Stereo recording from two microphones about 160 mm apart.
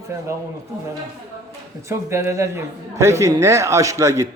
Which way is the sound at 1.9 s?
15° right (ahead or behind).